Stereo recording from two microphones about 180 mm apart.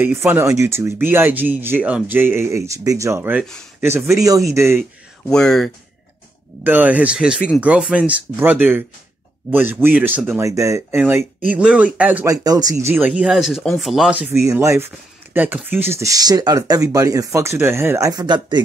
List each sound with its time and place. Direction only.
0.0 s speech: 15° right (ahead or behind)
5.3 s speech: 5° left (ahead or behind)
6.6 s speech: 10° right (ahead or behind)
12.4 s speech: 20° right (ahead or behind); by 14.4 s 5° right (ahead or behind)
14.4 s speech: 15° right (ahead or behind)